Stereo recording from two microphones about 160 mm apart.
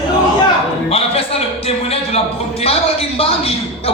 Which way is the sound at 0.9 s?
40° left (ahead or behind).